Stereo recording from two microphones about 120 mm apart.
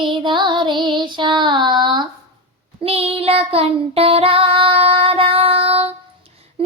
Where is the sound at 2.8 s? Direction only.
55° right (ahead or behind).